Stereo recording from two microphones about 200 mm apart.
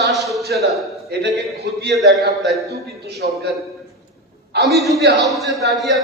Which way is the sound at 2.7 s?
55° right (ahead or behind).